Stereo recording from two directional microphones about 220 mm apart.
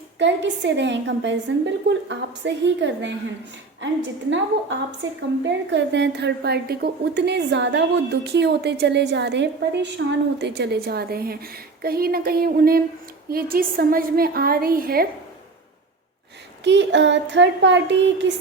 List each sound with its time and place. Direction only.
0.2 s a woman's voice: 55° right (ahead or behind)
4.3 s a woman's voice: 55° right (ahead or behind)
16.6 s a woman's voice: 55° right (ahead or behind)